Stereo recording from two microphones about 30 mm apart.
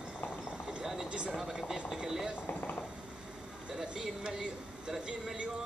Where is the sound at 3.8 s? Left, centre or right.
Right.